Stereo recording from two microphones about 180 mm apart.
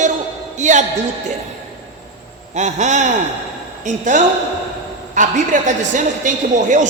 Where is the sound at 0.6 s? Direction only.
40° right (ahead or behind).